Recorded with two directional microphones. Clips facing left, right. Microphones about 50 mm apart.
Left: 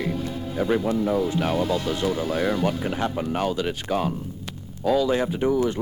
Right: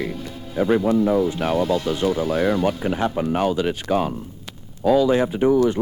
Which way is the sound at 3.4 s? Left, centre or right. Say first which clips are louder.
Right 4 dB; right.